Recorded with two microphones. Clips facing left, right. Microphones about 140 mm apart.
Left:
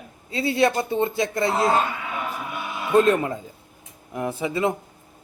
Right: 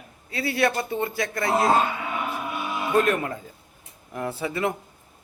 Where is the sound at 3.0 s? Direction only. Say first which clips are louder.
Left 5 dB; 20° left (ahead or behind).